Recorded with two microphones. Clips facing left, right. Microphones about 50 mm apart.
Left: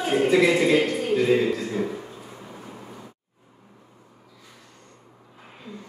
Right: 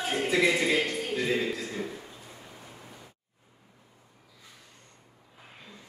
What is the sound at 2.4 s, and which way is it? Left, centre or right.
Vehicle, left.